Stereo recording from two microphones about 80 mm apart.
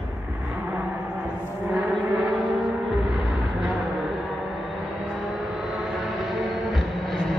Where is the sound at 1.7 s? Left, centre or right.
Centre.